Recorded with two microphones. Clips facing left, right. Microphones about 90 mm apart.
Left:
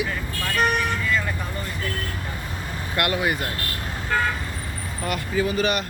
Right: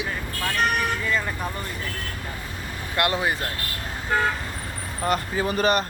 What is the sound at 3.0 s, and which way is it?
Speech, 25° right (ahead or behind).